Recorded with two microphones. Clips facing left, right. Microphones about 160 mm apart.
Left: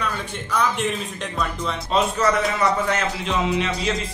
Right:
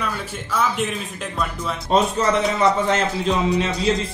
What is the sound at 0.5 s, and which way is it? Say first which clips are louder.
Speech: right 1 dB; 5° right (ahead or behind).